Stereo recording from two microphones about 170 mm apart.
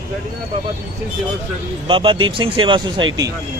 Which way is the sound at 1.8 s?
30° right (ahead or behind).